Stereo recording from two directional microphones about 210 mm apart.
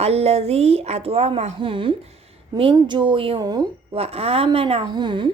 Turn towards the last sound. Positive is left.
turn(degrees=-20)  # may be behind; listen again after turning